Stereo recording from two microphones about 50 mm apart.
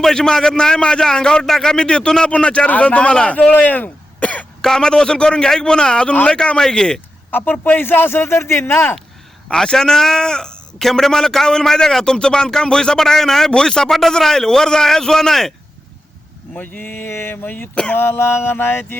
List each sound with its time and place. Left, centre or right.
0.0 s a man's voice: centre
3.5 s throat clearing: left
4.6 s a man's voice: centre
7.3 s a man's voice: left
9.5 s a man's voice: centre
16.6 s speech: left
17.9 s a man's voice: left